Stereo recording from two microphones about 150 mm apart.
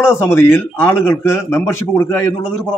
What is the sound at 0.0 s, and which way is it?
A man's voice, 15° left (ahead or behind).